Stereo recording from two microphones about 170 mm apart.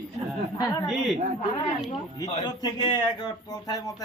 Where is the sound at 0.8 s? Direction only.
Centre (ahead or behind).